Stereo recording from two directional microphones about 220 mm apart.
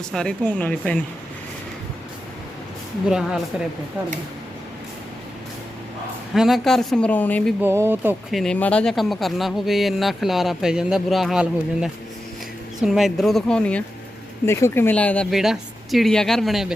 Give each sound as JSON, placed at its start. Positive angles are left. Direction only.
{"t": 0.1, "sound": "speech", "side_deg": 5}
{"t": 6.3, "sound": "speech", "side_deg": 0}
{"t": 7.6, "sound": "speech", "side_deg": -10}